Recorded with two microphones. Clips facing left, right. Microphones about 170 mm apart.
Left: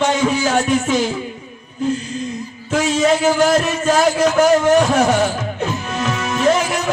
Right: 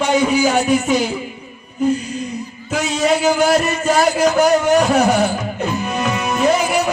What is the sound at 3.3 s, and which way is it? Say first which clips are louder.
Music: even; 10° right (ahead or behind).